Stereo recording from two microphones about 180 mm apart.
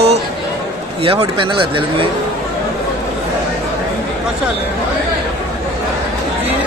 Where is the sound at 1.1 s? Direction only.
30° right (ahead or behind).